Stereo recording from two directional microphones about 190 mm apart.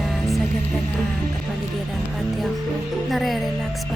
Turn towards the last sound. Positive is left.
turn(degrees=0)  # may be behind; listen again after turning